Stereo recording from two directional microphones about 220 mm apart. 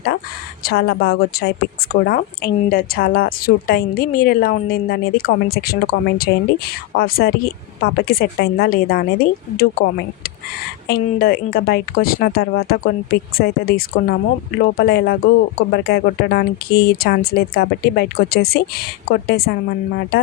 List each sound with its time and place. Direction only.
0.6 s a woman's voice: 45° left (ahead or behind)